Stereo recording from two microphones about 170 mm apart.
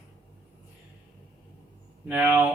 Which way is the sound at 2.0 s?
10° right (ahead or behind).